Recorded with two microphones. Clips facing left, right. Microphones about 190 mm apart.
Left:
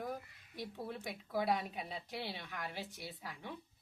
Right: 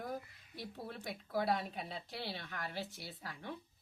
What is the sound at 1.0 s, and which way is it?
A woman's voice, 15° left (ahead or behind).